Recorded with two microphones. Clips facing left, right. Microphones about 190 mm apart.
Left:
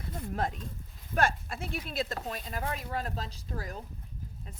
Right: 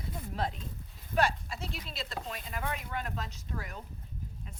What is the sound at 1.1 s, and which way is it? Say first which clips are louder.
Speech: even; 50° left (ahead or behind).